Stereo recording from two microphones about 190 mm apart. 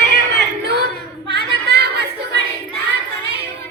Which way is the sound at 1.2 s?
60° right (ahead or behind).